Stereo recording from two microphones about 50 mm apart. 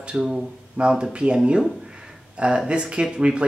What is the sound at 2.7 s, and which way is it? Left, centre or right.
Speech, right.